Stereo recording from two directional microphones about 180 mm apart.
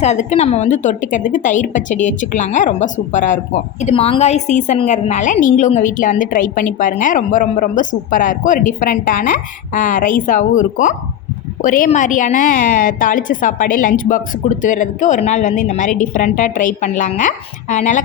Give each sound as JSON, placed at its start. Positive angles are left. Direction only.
{"t": 0.0, "sound": "a woman's voice", "side_deg": 40}